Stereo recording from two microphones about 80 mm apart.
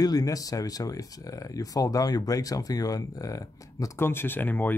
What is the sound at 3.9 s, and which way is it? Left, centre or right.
Speech, left.